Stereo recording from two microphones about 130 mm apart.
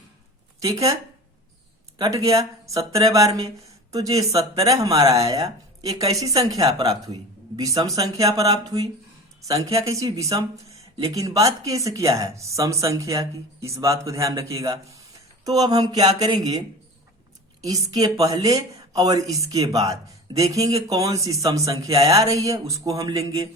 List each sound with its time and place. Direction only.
0.6 s speech: 25° right (ahead or behind)
2.0 s a woman's voice: 25° right (ahead or behind)
15.4 s a sound: 30° right (ahead or behind)
16.1 s speech: 30° right (ahead or behind)
17.7 s speech: 30° right (ahead or behind)